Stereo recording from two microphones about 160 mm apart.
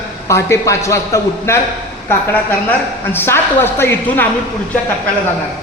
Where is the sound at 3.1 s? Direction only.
15° left (ahead or behind).